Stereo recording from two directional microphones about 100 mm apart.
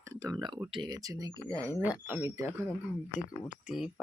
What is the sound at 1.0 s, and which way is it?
Speech, 35° right (ahead or behind).